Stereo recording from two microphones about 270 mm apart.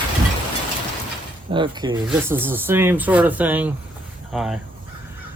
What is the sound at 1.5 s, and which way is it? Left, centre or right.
Speech, centre.